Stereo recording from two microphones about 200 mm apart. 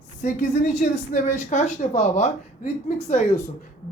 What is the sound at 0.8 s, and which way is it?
Speech, 40° left (ahead or behind).